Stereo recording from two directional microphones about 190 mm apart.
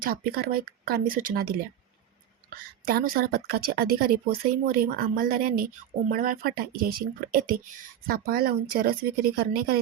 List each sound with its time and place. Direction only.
0.0 s speech: 50° right (ahead or behind)
2.8 s speech: 50° right (ahead or behind)